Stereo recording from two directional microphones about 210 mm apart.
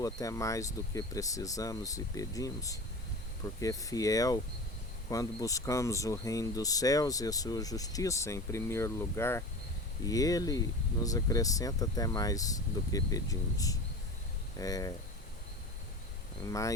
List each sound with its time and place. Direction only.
0.0 s speech: 15° left (ahead or behind)
16.5 s speech: 15° left (ahead or behind)